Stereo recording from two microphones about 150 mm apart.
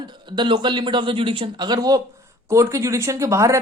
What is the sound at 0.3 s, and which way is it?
Speech, 30° right (ahead or behind).